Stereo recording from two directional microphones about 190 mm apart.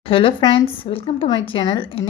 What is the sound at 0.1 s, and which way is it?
A woman's voice, 30° left (ahead or behind).